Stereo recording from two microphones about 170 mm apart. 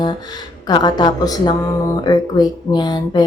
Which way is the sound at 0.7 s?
25° left (ahead or behind).